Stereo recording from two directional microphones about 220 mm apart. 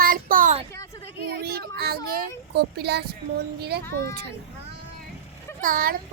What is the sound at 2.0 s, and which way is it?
Speech, 45° right (ahead or behind).